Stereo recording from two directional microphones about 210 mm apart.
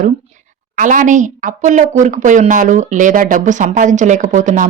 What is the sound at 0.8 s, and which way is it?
Speech, 35° right (ahead or behind).